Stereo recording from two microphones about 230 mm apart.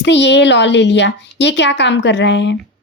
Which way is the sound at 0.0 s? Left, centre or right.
Left.